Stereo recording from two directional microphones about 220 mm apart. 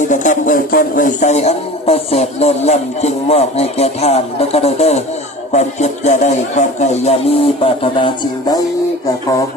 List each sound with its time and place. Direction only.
0.1 s speech: 35° left (ahead or behind)